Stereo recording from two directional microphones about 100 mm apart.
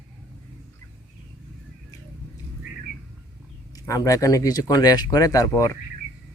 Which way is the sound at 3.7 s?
35° left (ahead or behind).